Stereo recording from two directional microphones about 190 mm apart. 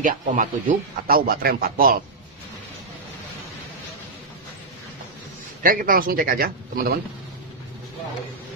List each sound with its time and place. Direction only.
0.0 s a man's voice: 45° right (ahead or behind)
5.6 s a man's voice: 50° right (ahead or behind)